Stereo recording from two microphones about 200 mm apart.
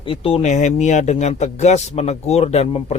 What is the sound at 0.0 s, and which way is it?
Speech, 25° left (ahead or behind).